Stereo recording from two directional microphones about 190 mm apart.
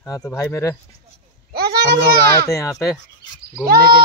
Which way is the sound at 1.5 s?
55° right (ahead or behind).